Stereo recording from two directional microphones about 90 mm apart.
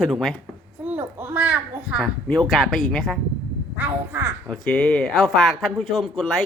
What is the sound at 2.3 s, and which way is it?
Speech, 5° left (ahead or behind).